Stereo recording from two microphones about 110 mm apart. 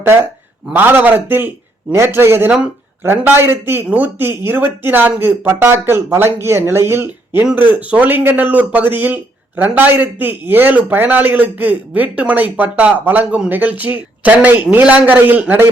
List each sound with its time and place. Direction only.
0.0 s speech: 20° right (ahead or behind)